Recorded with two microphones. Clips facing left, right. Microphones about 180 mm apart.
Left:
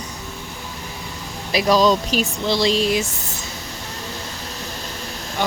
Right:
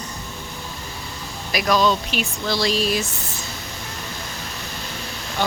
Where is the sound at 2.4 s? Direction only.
20° left (ahead or behind).